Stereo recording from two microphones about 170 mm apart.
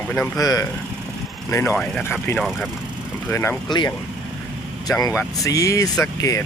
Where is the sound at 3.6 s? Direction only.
25° left (ahead or behind).